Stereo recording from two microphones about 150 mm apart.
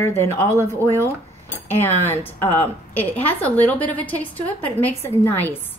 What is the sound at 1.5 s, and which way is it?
Speech, 15° left (ahead or behind).